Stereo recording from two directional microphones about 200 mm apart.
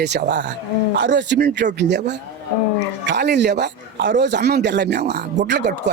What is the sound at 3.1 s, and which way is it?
Speech, 55° right (ahead or behind).